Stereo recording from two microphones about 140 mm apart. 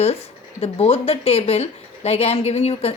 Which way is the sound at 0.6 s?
45° left (ahead or behind).